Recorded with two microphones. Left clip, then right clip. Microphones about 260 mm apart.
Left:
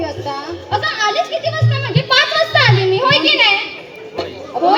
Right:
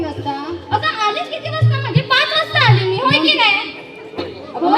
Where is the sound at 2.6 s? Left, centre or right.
Left.